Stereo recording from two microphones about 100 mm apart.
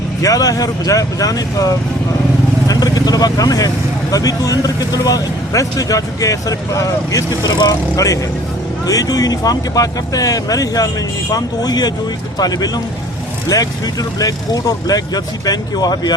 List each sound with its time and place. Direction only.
0.2 s speech: 35° left (ahead or behind)